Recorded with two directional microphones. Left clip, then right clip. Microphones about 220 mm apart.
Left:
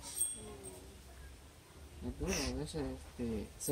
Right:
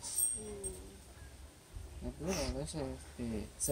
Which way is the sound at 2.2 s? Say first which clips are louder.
Even; 15° left (ahead or behind).